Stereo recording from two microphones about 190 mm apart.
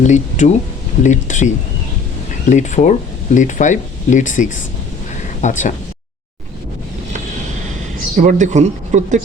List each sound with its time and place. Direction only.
0.0 s speech: 40° left (ahead or behind)
2.5 s speech: 40° left (ahead or behind)
8.1 s speech: 45° right (ahead or behind)